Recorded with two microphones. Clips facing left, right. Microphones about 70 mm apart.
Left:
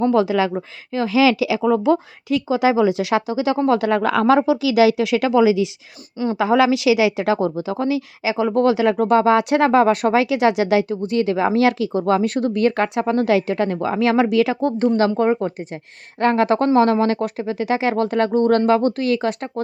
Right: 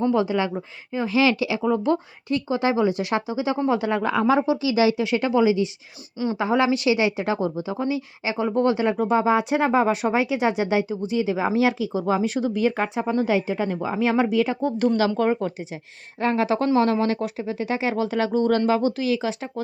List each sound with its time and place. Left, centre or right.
0.1 s a woman's voice: left
1.6 s a woman's voice: left
9.0 s speech: left
14.9 s speech: left
16.2 s speech: left